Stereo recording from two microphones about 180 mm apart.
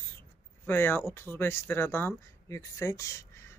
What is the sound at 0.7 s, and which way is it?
Speech, 10° left (ahead or behind).